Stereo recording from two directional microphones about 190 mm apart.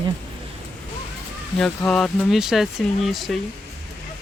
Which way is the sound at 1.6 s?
Centre (ahead or behind).